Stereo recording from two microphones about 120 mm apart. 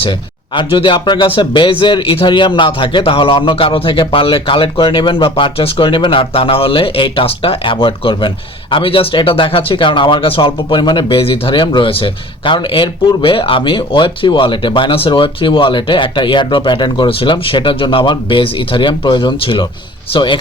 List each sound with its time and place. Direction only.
0.0 s speech: 45° left (ahead or behind)